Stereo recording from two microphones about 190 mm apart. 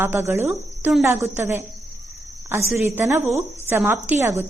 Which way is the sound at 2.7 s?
10° right (ahead or behind).